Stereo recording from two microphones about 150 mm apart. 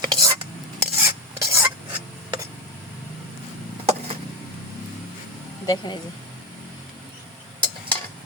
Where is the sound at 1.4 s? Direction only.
20° right (ahead or behind).